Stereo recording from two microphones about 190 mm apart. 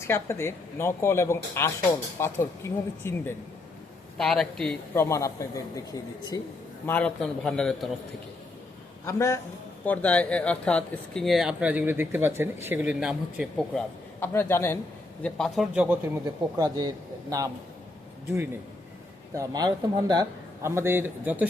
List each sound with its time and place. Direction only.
0.0 s speech: 15° left (ahead or behind)
4.9 s speech: 15° left (ahead or behind)
6.8 s speech: 5° left (ahead or behind)
9.0 s speech: 15° left (ahead or behind)
15.2 s speech: centre (ahead or behind)
16.2 s a man's voice: 20° right (ahead or behind)
19.3 s a man's voice: 20° right (ahead or behind)